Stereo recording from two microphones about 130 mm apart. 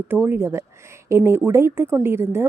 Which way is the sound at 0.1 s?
15° right (ahead or behind).